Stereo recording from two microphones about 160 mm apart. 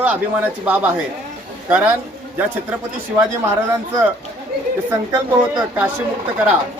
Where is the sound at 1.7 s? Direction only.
10° right (ahead or behind).